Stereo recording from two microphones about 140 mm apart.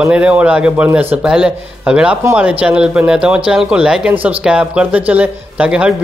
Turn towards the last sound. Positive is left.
turn(degrees=-10)  # may be behind; listen again after turning